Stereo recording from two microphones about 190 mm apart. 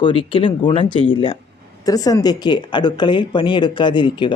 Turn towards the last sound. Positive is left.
turn(degrees=25)  # may be behind; listen again after turning